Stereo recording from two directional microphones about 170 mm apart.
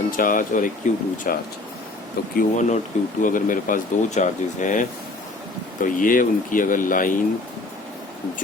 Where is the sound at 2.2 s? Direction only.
65° left (ahead or behind).